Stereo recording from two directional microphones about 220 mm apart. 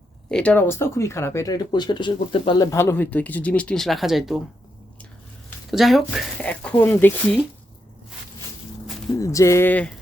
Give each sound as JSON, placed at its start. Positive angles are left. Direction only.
{"t": 0.3, "sound": "speech", "side_deg": 5}
{"t": 2.7, "sound": "speech", "side_deg": 10}
{"t": 5.7, "sound": "speech", "side_deg": 0}
{"t": 9.1, "sound": "speech", "side_deg": 15}